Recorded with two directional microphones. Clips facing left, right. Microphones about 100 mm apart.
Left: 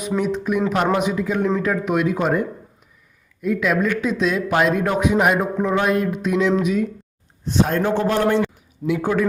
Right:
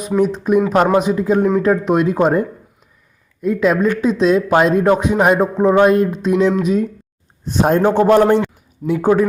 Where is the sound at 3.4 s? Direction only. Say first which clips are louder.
Right 5 dB; 30° right (ahead or behind).